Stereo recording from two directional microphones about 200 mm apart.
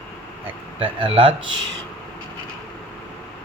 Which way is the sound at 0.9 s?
25° right (ahead or behind).